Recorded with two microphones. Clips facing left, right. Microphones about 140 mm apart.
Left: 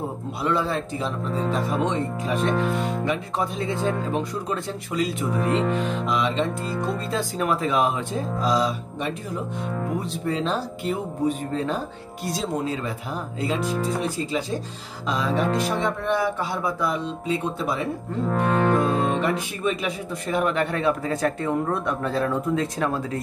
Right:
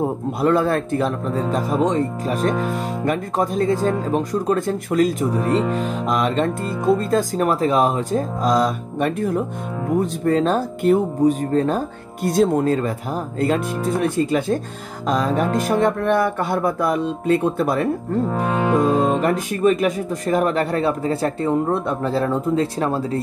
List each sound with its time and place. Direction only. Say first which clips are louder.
0.4 s speech: right 6 dB; 50° right (ahead or behind)
1.9 s speech: right 5 dB; 40° right (ahead or behind)
2.5 s music: right 1 dB; centre (ahead or behind)
3.1 s speech: right 5 dB; 45° right (ahead or behind)
5.3 s music: right 3 dB; centre (ahead or behind)
5.8 s speech: right 3 dB; 45° right (ahead or behind)
13.7 s music: right 4 dB; centre (ahead or behind)
15.0 s speech: right 4 dB; 45° right (ahead or behind)
18.3 s music: left 1 dB; 5° right (ahead or behind)
19.6 s speech: right 12 dB; 45° right (ahead or behind); by 23.2 s 30° right (ahead or behind)